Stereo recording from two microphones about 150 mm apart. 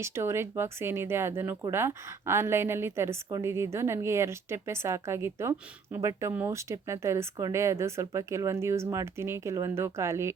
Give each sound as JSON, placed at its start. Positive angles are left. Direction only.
{"t": 0.0, "sound": "a woman's voice", "side_deg": -15}